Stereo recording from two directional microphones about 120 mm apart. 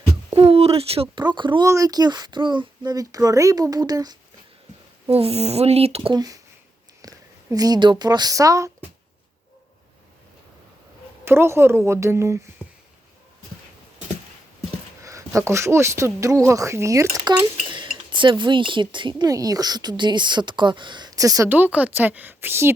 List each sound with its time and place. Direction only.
0.3 s speech: 55° right (ahead or behind)
1.1 s speech: 40° right (ahead or behind)
1.6 s speech: 25° right (ahead or behind)
5.0 s speech: 55° right (ahead or behind)
6.1 s speech: 30° right (ahead or behind)
7.0 s a sound: 30° right (ahead or behind)
7.5 s speech: 30° right (ahead or behind)
11.3 s speech: 20° right (ahead or behind)
15.0 s speech: 25° right (ahead or behind)
17.2 s cutlery: 40° right (ahead or behind)
19.3 s speech: 30° right (ahead or behind)
21.5 s a woman's voice: 15° right (ahead or behind)